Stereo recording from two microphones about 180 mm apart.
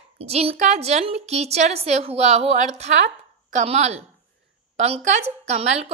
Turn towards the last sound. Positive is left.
turn(degrees=-40)  # may be behind; listen again after turning